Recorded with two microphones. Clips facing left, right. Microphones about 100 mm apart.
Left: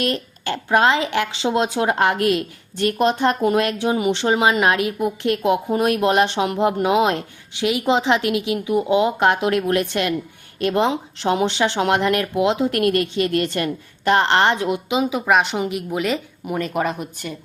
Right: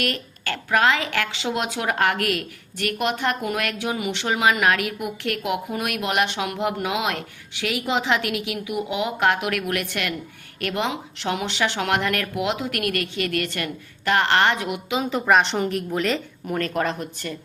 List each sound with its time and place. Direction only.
0.0 s speech: 25° left (ahead or behind)
15.1 s a woman's voice: 5° left (ahead or behind)